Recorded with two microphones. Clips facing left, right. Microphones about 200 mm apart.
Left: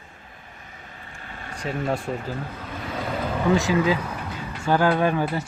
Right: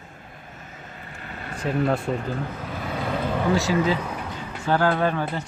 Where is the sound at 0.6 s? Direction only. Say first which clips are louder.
Right 3 dB; 45° right (ahead or behind).